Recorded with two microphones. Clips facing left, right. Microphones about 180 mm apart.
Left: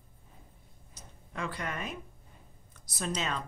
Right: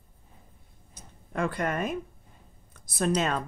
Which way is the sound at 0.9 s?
50° right (ahead or behind).